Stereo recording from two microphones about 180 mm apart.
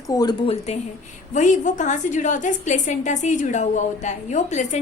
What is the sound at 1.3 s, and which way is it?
A woman's voice, 45° left (ahead or behind).